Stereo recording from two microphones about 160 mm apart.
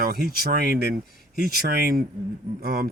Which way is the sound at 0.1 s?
70° right (ahead or behind).